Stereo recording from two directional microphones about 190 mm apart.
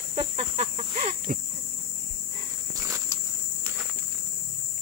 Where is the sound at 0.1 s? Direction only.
35° right (ahead or behind).